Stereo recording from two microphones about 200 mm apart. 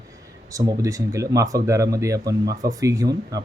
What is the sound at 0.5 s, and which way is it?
Speech, 20° right (ahead or behind).